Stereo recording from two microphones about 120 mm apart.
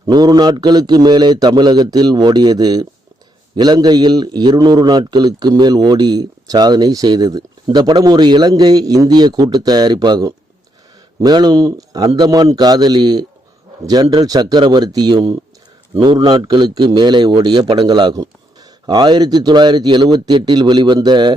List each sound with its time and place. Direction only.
0.0 s a man's voice: 35° right (ahead or behind)